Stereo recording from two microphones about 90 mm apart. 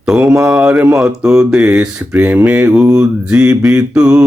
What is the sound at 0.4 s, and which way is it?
Mantra, 10° right (ahead or behind).